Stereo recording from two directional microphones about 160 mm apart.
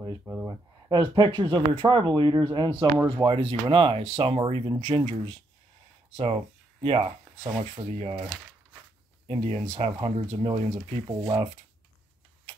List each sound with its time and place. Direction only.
0.2 s speech: 5° right (ahead or behind)
0.5 s speech: 25° right (ahead or behind)
9.3 s speech: 40° right (ahead or behind)